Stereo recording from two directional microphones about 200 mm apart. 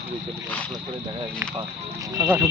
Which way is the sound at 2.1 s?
10° right (ahead or behind).